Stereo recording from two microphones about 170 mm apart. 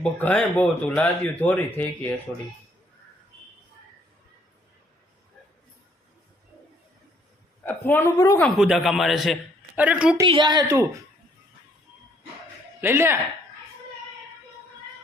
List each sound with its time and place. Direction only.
0.0 s speech: 5° left (ahead or behind)
7.6 s speech: 10° left (ahead or behind)
8.4 s a man's voice: centre (ahead or behind)
10.2 s a woman's voice: 30° right (ahead or behind)
12.8 s speech: 15° right (ahead or behind)